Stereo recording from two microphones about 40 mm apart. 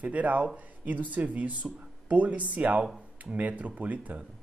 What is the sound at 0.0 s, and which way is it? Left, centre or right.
Speech, right.